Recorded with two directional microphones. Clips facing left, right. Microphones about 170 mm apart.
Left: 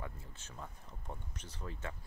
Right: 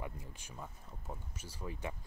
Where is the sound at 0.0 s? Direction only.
15° right (ahead or behind).